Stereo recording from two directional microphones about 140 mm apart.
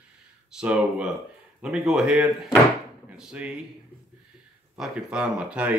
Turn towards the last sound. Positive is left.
turn(degrees=-10)  # may be behind; listen again after turning